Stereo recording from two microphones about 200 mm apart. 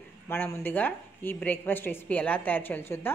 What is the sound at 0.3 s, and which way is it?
A woman's voice, 10° left (ahead or behind).